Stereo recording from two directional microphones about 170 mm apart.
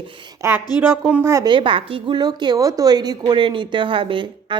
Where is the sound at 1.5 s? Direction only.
30° right (ahead or behind).